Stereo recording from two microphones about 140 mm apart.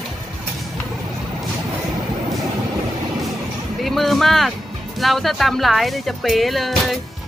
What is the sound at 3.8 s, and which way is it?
Speech, centre (ahead or behind).